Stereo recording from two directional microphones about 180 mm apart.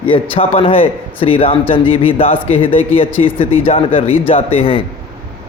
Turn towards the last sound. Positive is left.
turn(degrees=30)  # may be behind; listen again after turning